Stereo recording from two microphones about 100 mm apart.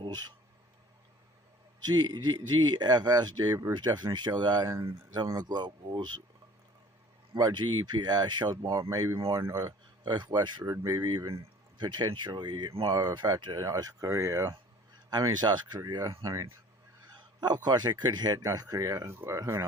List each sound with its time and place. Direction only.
0.0 s speech: 45° right (ahead or behind)
1.8 s speech: 45° right (ahead or behind)
7.3 s speech: 45° right (ahead or behind)
10.7 s speech: 35° right (ahead or behind)
11.8 s speech: 45° right (ahead or behind)
15.1 s speech: 45° right (ahead or behind)
17.4 s speech: 45° right (ahead or behind); by 19.6 s 25° right (ahead or behind)